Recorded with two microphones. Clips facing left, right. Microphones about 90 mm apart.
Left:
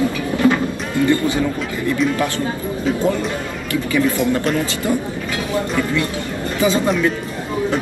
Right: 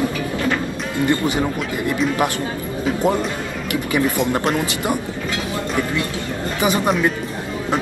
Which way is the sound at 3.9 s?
20° right (ahead or behind).